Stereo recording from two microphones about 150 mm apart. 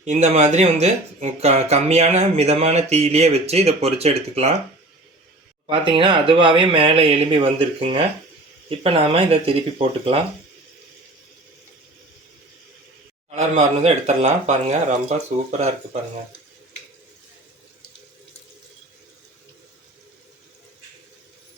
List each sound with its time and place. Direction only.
0.0 s speech: 50° right (ahead or behind)
5.6 s speech: 35° right (ahead or behind)
13.3 s speech: 50° right (ahead or behind)